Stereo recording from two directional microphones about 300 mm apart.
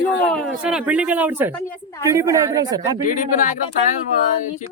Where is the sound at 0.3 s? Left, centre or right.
Centre.